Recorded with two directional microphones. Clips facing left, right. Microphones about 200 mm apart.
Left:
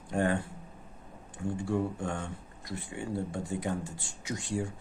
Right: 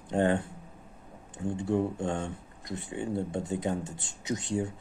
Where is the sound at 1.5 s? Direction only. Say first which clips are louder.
Right 3 dB; 20° right (ahead or behind).